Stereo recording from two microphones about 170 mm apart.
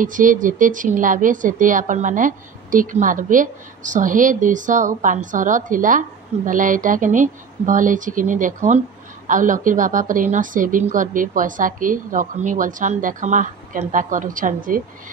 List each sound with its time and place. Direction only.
0.0 s a woman's voice: 50° right (ahead or behind)